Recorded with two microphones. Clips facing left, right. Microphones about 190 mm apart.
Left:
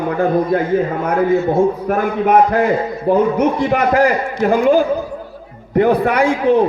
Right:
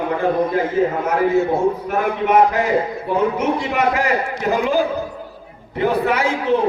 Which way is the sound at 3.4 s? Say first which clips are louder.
Left 4 dB; 55° left (ahead or behind).